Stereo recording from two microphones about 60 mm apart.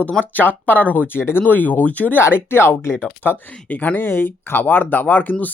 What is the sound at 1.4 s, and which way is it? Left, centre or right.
Speech, left.